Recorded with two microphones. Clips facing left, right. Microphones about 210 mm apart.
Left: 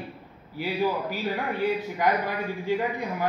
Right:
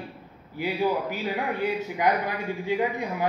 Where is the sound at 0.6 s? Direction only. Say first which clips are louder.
Right 1 dB; 15° right (ahead or behind).